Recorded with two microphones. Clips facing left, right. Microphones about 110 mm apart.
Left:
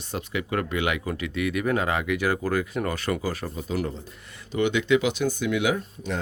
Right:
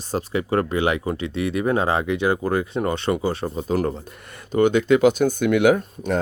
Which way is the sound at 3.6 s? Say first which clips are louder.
Right 6 dB; 45° right (ahead or behind).